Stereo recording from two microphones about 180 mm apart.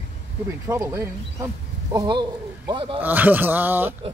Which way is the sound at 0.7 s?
15° right (ahead or behind).